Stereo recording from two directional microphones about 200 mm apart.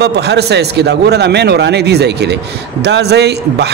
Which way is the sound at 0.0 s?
55° right (ahead or behind).